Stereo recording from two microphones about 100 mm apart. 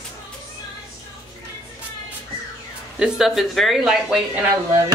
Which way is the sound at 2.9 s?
5° right (ahead or behind).